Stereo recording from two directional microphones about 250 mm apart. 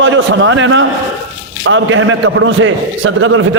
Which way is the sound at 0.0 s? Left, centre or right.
Right.